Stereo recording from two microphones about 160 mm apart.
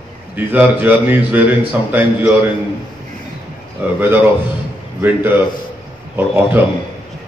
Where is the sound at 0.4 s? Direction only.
10° right (ahead or behind).